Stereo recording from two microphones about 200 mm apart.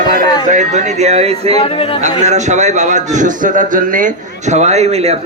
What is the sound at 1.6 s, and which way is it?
Speech, 30° left (ahead or behind).